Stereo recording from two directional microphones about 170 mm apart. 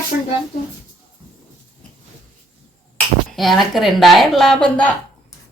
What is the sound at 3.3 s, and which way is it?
Speech, centre (ahead or behind).